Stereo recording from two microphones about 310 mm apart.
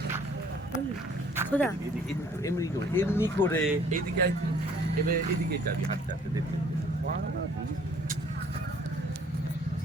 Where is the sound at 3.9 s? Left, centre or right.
Right.